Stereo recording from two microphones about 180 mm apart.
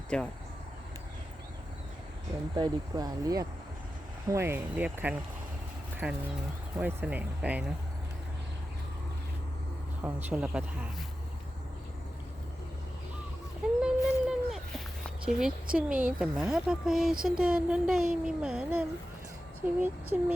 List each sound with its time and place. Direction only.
0.1 s speech: 5° left (ahead or behind)
2.6 s speech: 20° right (ahead or behind)
10.0 s speech: 10° right (ahead or behind)
13.8 s a sound: 5° right (ahead or behind)
15.3 s speech: 5° right (ahead or behind)